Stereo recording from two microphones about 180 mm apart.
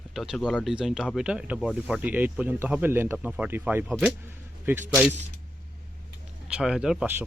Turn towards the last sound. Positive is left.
turn(degrees=-5)  # may be behind; listen again after turning